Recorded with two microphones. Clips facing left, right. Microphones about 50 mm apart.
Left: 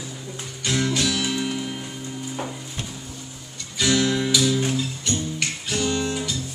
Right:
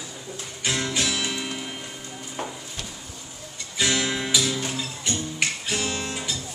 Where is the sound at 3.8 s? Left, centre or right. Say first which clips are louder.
Left 4 dB; centre.